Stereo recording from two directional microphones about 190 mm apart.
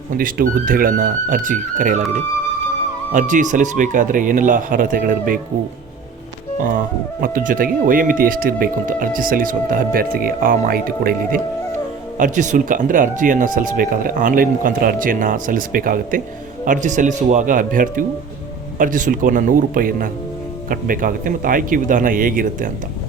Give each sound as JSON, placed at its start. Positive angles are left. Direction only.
{"t": 0.1, "sound": "speech", "side_deg": -45}
{"t": 3.1, "sound": "speech", "side_deg": -40}
{"t": 6.6, "sound": "speech", "side_deg": -45}